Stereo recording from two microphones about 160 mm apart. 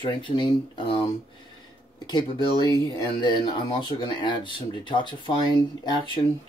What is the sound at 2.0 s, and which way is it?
Speech, 25° left (ahead or behind).